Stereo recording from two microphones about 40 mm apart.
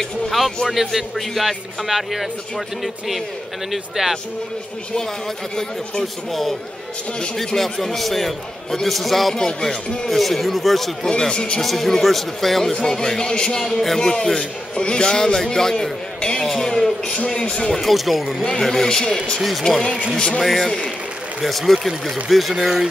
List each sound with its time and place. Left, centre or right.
0.7 s a man's voice: centre
3.7 s speech: centre
7.3 s a man's voice: centre
9.3 s a man's voice: centre
10.0 s a man's voice: centre
11.1 s speech: left
11.6 s a man's voice: centre; by 13.6 s left
13.7 s a man's voice: centre
17.3 s speech: left
17.6 s a man's voice: centre
20.3 s a man's voice: centre